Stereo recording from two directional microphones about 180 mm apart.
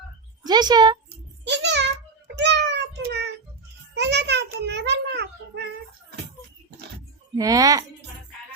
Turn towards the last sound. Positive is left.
turn(degrees=-20)  # may be behind; listen again after turning